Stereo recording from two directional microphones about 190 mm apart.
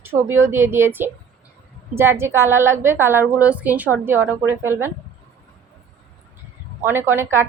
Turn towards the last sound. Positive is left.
turn(degrees=-15)  # may be behind; listen again after turning